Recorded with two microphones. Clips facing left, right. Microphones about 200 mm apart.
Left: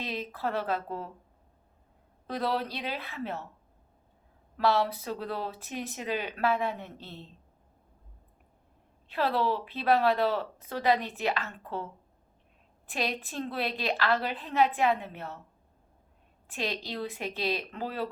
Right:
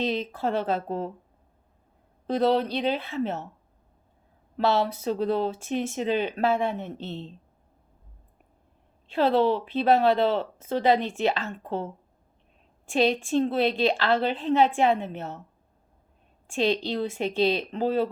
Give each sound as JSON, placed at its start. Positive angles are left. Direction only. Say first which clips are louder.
{"t": 0.0, "sound": "speech", "louder": "right 7 dB", "side_deg": -25}
{"t": 2.2, "sound": "speech", "louder": "right 8 dB", "side_deg": -25}
{"t": 4.5, "sound": "speech", "louder": "right 3 dB", "side_deg": -25}
{"t": 9.0, "sound": "speech", "louder": "right 7 dB", "side_deg": -25}
{"t": 16.5, "sound": "a woman's voice", "louder": "right 10 dB", "side_deg": -30}